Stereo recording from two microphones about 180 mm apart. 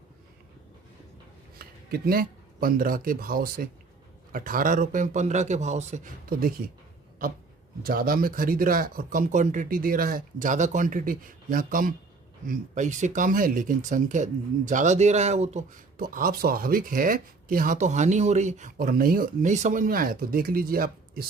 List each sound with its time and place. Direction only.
1.5 s speech: 55° right (ahead or behind)
7.8 s speech: 55° right (ahead or behind)